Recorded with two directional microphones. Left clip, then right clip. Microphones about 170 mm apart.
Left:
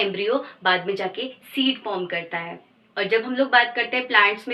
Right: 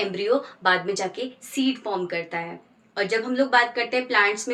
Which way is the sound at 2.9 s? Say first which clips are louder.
Left 2 dB; 35° right (ahead or behind).